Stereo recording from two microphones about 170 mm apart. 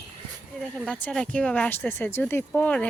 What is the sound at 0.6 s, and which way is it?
Speech, 5° left (ahead or behind).